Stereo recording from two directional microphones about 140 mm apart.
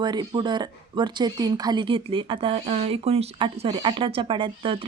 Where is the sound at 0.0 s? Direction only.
30° right (ahead or behind).